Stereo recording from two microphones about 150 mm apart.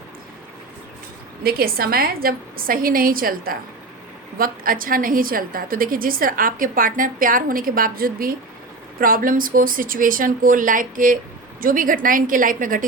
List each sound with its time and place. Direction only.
1.5 s a woman's voice: 85° right; by 12.8 s 65° right (ahead or behind)